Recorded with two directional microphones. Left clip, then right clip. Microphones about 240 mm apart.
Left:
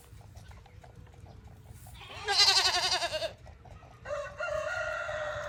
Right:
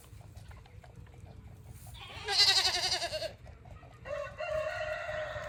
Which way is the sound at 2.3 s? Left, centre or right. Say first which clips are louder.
Left 2 dB; centre.